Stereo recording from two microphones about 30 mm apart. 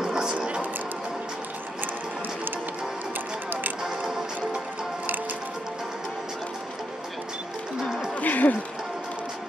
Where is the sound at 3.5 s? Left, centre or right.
Right.